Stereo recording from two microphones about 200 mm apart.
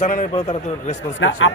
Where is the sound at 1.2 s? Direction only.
75° left (ahead or behind).